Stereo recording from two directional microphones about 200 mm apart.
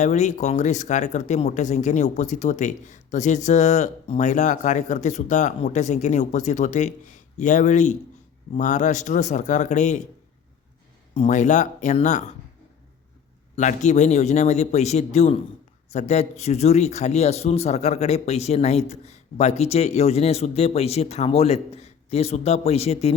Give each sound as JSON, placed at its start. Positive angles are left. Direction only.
{"t": 0.0, "sound": "speech", "side_deg": 35}
{"t": 11.1, "sound": "speech", "side_deg": 35}
{"t": 13.6, "sound": "speech", "side_deg": 35}